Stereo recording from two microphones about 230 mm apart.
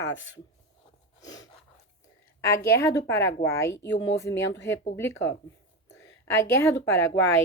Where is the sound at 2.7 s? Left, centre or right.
Centre.